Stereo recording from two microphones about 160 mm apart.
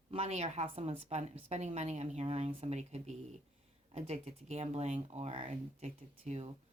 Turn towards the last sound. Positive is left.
turn(degrees=-40)  # may be behind; listen again after turning